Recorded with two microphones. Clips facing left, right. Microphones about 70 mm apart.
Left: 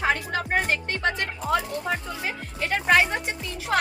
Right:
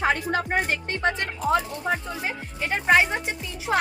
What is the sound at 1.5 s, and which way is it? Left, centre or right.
Speech, right.